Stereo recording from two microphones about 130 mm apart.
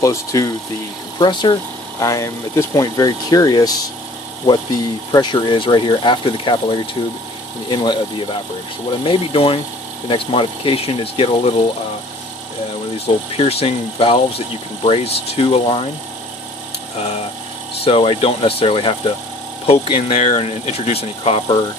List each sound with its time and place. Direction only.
0.0 s speech: 25° left (ahead or behind)
5.1 s speech: 35° left (ahead or behind)
13.4 s speech: 50° left (ahead or behind)
17.8 s speech: 45° left (ahead or behind)